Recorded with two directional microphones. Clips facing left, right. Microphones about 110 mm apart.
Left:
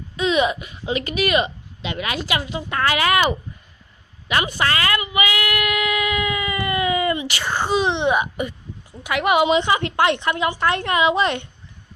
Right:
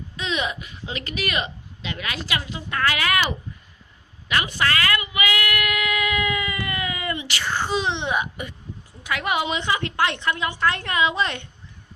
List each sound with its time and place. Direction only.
0.2 s speech: 15° left (ahead or behind)
4.5 s child singing: 25° left (ahead or behind)
7.7 s speech: 15° left (ahead or behind)